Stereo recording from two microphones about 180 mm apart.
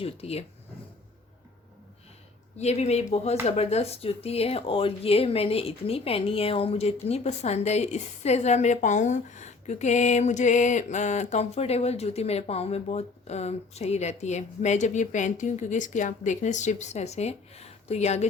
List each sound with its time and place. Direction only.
0.0 s speech: 35° left (ahead or behind)
2.6 s speech: 35° left (ahead or behind)